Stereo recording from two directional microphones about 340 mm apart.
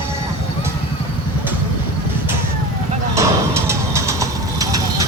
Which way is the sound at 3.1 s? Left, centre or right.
Centre.